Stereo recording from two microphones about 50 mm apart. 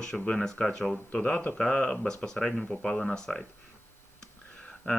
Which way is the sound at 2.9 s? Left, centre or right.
Centre.